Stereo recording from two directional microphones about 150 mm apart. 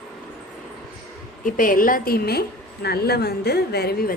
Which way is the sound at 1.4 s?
65° left (ahead or behind).